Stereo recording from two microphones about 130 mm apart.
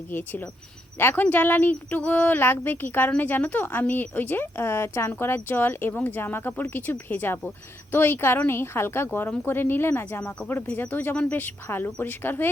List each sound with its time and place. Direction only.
0.1 s speech: 15° left (ahead or behind)